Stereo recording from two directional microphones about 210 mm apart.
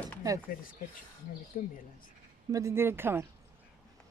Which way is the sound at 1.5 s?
40° left (ahead or behind).